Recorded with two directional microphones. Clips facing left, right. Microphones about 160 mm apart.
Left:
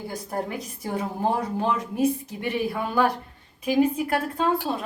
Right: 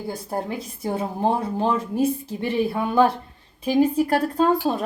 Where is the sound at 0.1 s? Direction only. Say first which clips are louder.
Right 3 dB; 30° right (ahead or behind).